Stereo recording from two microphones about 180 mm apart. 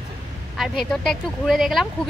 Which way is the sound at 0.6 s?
Centre (ahead or behind).